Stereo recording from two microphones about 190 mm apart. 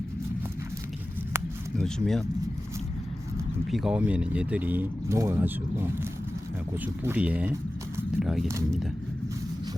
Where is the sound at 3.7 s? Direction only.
Centre (ahead or behind).